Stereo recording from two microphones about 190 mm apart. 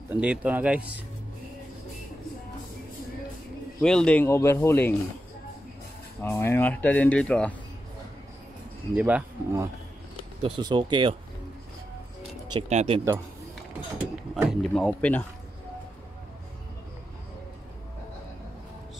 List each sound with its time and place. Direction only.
0.1 s speech: 5° right (ahead or behind)
3.8 s speech: 5° left (ahead or behind)
6.2 s speech: 10° left (ahead or behind)
8.9 s speech: 10° right (ahead or behind)
10.4 s speech: 25° right (ahead or behind)
12.5 s speech: 35° right (ahead or behind)
14.3 s speech: centre (ahead or behind)